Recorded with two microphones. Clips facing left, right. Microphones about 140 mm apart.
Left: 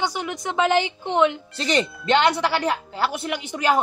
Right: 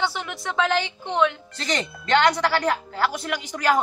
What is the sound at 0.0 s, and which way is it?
A woman's voice, 15° left (ahead or behind).